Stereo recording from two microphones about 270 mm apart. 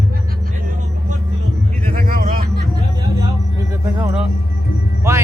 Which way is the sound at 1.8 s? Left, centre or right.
Right.